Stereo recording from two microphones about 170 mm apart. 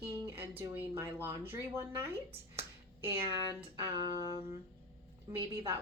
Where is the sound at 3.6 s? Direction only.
25° right (ahead or behind).